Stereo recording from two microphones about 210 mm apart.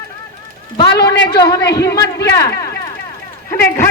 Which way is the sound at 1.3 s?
20° left (ahead or behind).